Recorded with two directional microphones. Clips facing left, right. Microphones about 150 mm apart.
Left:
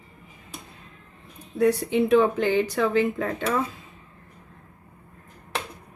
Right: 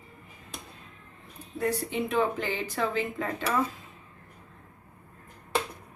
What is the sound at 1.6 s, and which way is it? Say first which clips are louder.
Speech: left 8 dB; 75° left (ahead or behind).